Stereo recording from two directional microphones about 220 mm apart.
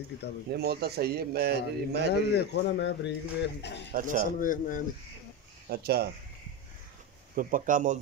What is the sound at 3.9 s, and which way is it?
Speech, 35° right (ahead or behind).